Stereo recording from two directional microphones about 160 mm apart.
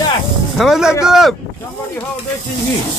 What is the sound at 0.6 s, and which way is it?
Speech, centre (ahead or behind).